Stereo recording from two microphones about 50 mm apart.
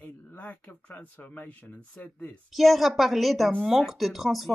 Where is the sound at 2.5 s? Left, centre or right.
Centre.